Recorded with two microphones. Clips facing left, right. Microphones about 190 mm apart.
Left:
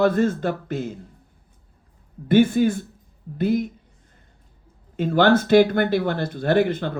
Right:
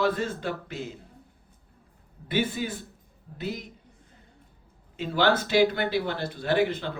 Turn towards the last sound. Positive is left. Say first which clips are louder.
# left 5 dB
turn(degrees=50)  # may be behind; listen again after turning